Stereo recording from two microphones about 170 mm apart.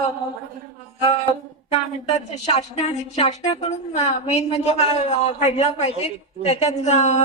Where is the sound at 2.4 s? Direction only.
40° left (ahead or behind).